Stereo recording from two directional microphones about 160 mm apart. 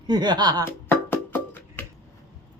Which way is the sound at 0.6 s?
15° left (ahead or behind).